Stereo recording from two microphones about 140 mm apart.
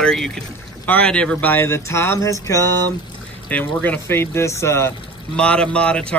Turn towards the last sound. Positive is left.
turn(degrees=5)  # may be behind; listen again after turning